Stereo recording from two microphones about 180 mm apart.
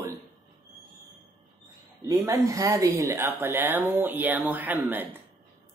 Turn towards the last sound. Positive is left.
turn(degrees=-10)  # may be behind; listen again after turning